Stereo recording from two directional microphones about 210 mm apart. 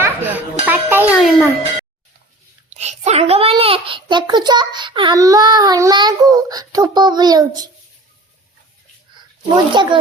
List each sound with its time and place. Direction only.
0.0 s children playing: 10° right (ahead or behind)
0.6 s music: 10° right (ahead or behind)
2.7 s a child's voice: 30° right (ahead or behind)
9.8 s a child's voice: 20° right (ahead or behind)